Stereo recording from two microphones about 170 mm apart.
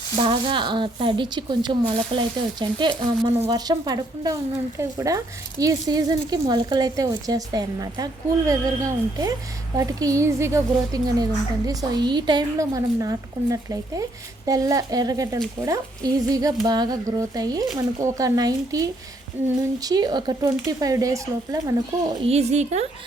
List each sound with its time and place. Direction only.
0.2 s speech: 30° right (ahead or behind)
22.2 s speech: 40° right (ahead or behind)